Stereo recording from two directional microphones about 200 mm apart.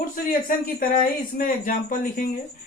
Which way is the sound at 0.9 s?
40° left (ahead or behind).